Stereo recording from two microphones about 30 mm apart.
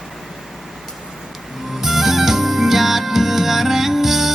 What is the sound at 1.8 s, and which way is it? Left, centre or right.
Music, centre.